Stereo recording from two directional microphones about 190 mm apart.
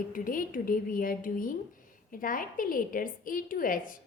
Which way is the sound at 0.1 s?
45° left (ahead or behind).